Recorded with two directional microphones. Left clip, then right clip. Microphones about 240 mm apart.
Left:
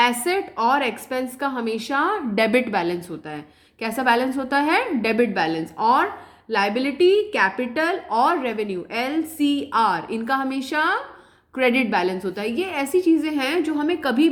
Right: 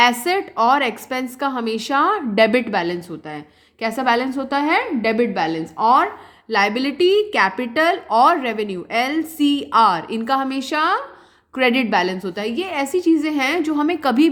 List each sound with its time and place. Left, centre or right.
0.0 s a woman's voice: right